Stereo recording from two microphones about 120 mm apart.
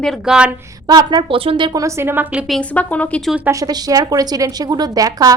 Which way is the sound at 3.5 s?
30° right (ahead or behind).